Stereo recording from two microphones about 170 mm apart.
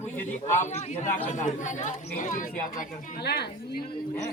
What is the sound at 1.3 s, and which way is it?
Speech, 50° left (ahead or behind).